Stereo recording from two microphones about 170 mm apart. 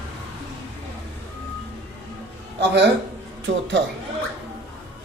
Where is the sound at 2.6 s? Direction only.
90° right.